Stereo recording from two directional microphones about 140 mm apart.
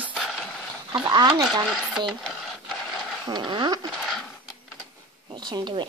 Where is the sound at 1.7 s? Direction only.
Centre (ahead or behind).